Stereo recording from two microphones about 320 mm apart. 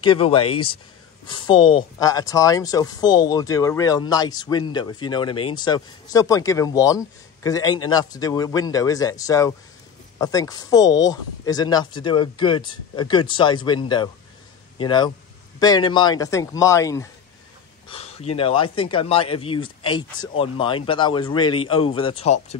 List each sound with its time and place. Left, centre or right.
0.0 s speech: centre